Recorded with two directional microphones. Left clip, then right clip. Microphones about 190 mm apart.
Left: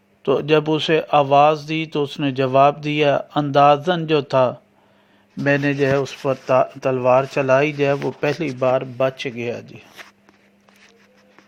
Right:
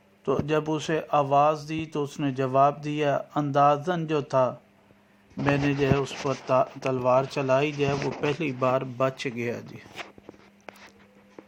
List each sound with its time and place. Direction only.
0.2 s a man's voice: 30° left (ahead or behind)
8.5 s speech: 15° left (ahead or behind)